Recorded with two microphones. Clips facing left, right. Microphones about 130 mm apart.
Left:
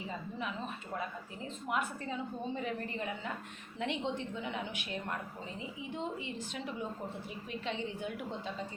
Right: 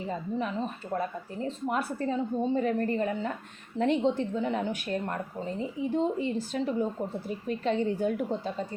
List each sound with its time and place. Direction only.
0.3 s speech: 40° right (ahead or behind)